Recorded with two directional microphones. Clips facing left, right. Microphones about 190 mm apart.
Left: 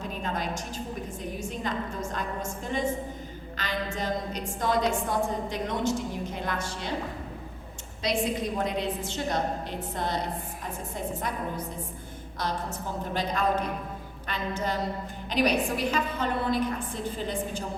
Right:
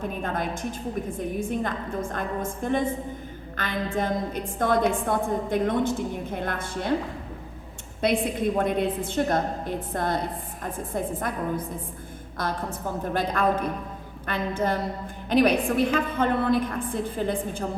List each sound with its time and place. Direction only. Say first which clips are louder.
0.0 s a woman's voice: right 3 dB; 55° right (ahead or behind)
8.0 s a woman's voice: right 4 dB; 55° right (ahead or behind)